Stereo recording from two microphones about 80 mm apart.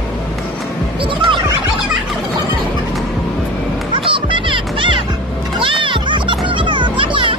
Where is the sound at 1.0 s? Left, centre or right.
Right.